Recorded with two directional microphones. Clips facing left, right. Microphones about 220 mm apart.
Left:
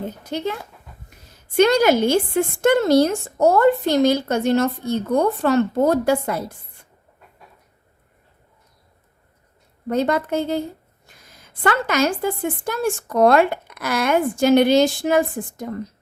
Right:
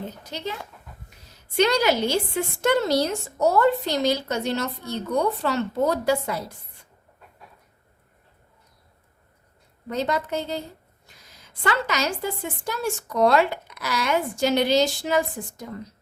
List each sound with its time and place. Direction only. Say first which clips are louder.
0.3 s a woman's voice: left 8 dB; 55° left (ahead or behind)
1.5 s a woman's voice: left 6 dB; 50° left (ahead or behind)
9.8 s a woman's voice: left 6 dB; 55° left (ahead or behind)